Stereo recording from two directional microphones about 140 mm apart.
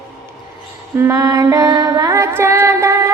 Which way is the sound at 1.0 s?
25° right (ahead or behind).